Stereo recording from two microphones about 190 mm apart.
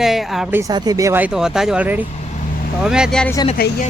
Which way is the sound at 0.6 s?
20° right (ahead or behind).